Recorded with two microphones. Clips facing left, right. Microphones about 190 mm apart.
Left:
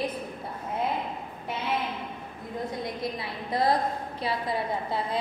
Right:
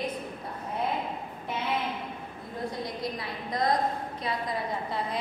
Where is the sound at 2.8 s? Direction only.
25° left (ahead or behind).